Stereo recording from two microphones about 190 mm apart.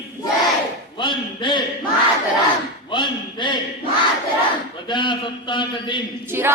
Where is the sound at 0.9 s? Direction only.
25° left (ahead or behind).